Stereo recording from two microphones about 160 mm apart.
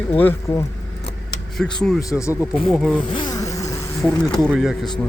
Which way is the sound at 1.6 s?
Centre (ahead or behind).